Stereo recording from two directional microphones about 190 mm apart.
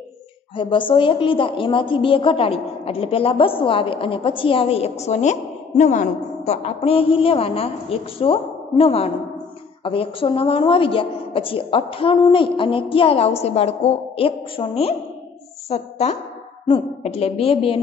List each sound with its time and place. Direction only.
0.6 s a woman's voice: 25° left (ahead or behind)